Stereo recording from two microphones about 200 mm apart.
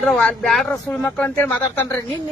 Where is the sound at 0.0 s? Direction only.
Centre (ahead or behind).